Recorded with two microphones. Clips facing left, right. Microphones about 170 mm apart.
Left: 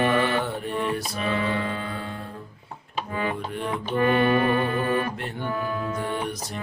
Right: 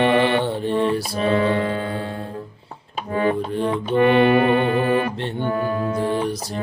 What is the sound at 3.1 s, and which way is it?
Music, 40° right (ahead or behind).